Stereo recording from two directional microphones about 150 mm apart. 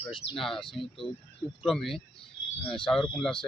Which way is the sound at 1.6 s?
Centre (ahead or behind).